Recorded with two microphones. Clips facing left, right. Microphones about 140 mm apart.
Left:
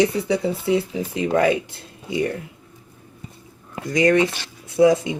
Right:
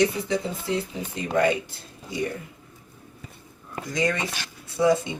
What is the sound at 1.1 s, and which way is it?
Speech, 90° left.